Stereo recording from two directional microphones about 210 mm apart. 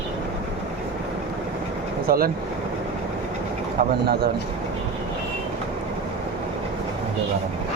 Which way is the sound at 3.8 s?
35° right (ahead or behind).